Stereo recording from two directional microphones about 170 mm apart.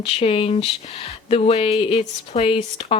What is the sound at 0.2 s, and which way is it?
Speech, 35° left (ahead or behind).